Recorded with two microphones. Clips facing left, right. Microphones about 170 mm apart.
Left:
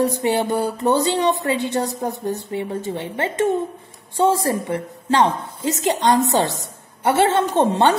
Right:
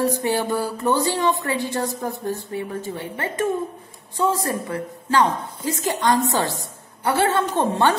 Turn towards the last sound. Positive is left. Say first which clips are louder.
# left 3 dB
turn(degrees=20)  # may be behind; listen again after turning